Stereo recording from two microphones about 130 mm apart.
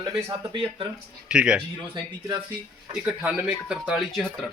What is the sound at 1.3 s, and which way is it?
Speech, 5° right (ahead or behind).